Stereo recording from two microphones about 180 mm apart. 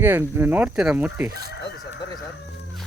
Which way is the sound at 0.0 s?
15° right (ahead or behind).